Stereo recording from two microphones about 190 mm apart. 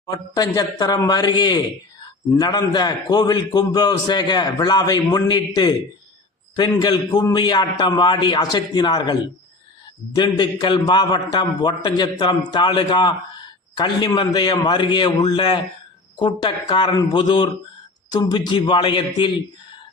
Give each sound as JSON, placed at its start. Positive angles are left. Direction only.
{"t": 0.3, "sound": "a man's voice", "side_deg": 20}
{"t": 10.2, "sound": "a man's voice", "side_deg": 20}